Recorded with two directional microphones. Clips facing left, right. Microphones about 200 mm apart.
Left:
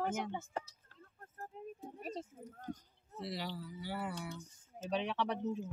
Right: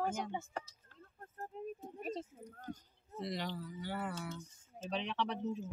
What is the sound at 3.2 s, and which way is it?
Speech, 5° left (ahead or behind).